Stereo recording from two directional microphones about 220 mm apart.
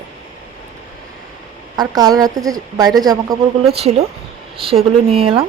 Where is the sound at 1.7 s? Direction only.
15° right (ahead or behind).